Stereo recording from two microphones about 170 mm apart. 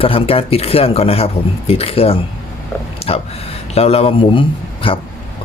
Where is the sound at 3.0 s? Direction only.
35° left (ahead or behind).